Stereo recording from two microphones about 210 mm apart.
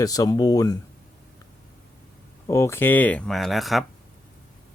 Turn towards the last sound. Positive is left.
turn(degrees=0)  # may be behind; listen again after turning